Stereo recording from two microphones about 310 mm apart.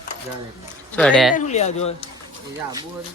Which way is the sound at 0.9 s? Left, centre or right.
Centre.